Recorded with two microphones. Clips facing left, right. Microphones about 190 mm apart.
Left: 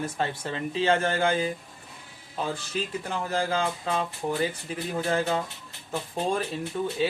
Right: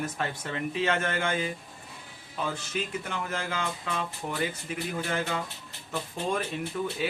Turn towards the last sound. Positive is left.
turn(degrees=30)  # may be behind; listen again after turning